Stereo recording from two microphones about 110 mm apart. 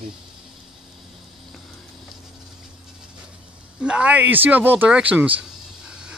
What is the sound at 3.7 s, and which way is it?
Speech, 10° right (ahead or behind).